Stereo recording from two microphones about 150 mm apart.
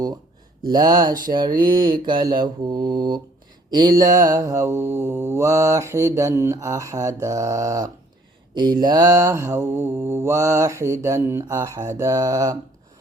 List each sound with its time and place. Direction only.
0.7 s mantra: 25° right (ahead or behind)